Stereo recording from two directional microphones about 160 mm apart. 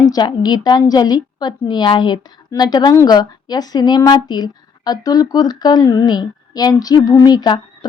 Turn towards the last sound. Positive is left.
turn(degrees=25)  # may be behind; listen again after turning